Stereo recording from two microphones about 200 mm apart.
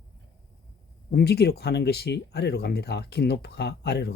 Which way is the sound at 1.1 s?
55° left (ahead or behind).